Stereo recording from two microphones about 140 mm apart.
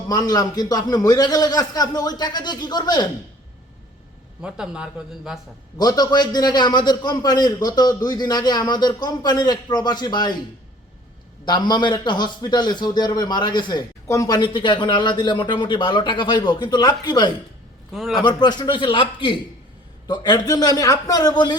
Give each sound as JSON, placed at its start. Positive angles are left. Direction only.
{"t": 0.1, "sound": "a man's voice", "side_deg": 25}
{"t": 4.4, "sound": "a man's voice", "side_deg": -5}
{"t": 5.7, "sound": "a man's voice", "side_deg": 30}
{"t": 11.4, "sound": "speech", "side_deg": 30}
{"t": 17.9, "sound": "a man's voice", "side_deg": 0}
{"t": 18.2, "sound": "a man's voice", "side_deg": 30}